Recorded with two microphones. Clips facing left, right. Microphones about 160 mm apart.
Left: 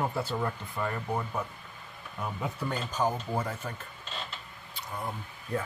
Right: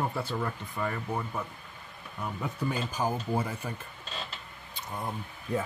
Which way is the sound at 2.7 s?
10° right (ahead or behind).